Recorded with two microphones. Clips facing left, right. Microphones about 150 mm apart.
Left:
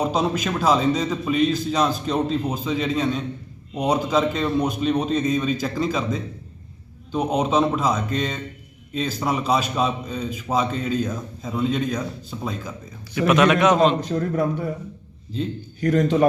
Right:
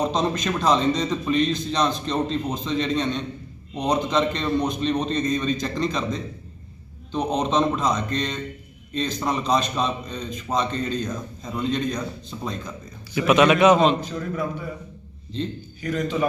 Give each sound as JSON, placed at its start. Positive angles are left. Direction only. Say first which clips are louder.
{"t": 0.0, "sound": "a man's voice", "louder": "left 1 dB", "side_deg": 5}
{"t": 14.1, "sound": "a man's voice", "louder": "left 5 dB", "side_deg": 55}
{"t": 15.8, "sound": "a man's voice", "louder": "left 7 dB", "side_deg": 70}